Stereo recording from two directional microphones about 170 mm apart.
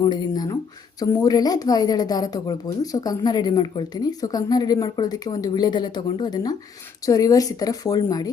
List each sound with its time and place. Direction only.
0.0 s a woman's voice: 25° left (ahead or behind)